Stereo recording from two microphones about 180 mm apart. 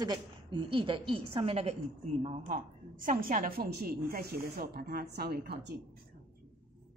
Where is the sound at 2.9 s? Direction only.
50° right (ahead or behind).